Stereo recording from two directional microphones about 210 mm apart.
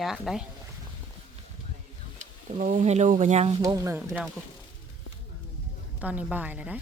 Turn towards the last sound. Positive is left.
turn(degrees=-5)  # may be behind; listen again after turning